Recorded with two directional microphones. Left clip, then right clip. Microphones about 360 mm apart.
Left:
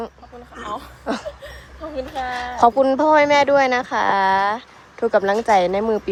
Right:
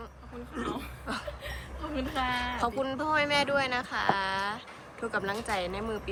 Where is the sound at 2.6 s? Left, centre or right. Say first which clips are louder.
Left 16 dB; centre.